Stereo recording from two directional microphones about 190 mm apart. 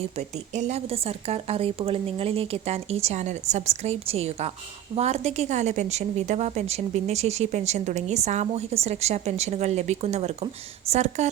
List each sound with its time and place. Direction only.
0.2 s a woman's voice: 35° right (ahead or behind)